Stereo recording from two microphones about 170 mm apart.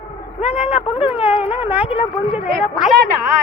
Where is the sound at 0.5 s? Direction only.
5° right (ahead or behind).